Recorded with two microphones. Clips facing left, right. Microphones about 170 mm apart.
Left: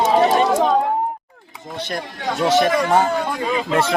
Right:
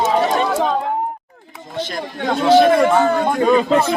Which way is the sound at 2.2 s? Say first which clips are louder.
Right 5 dB; 55° right (ahead or behind).